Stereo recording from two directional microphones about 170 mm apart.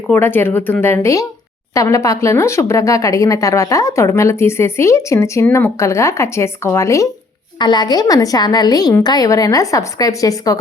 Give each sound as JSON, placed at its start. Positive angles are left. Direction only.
{"t": 0.1, "sound": "a woman's voice", "side_deg": 10}